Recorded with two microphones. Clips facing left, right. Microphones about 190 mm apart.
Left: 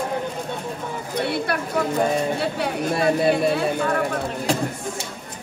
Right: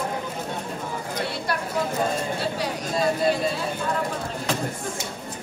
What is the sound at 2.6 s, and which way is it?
Speech, 60° left (ahead or behind).